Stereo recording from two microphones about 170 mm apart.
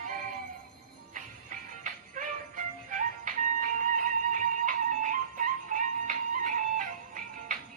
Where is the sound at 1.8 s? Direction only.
50° right (ahead or behind).